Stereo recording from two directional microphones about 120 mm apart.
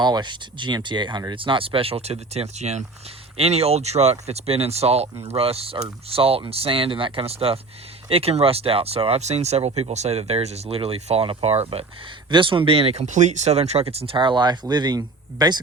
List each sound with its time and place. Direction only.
0.0 s speech: 40° right (ahead or behind); by 11.9 s 55° right (ahead or behind)
12.3 s speech: 45° right (ahead or behind)